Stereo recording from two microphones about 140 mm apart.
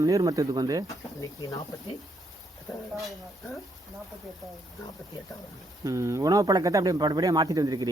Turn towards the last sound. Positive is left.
turn(degrees=-25)  # may be behind; listen again after turning